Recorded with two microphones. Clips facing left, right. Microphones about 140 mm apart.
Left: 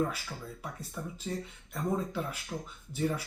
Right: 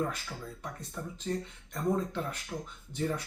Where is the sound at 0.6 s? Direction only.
5° left (ahead or behind).